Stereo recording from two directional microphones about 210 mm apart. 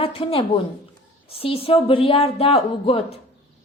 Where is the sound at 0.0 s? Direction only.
25° left (ahead or behind).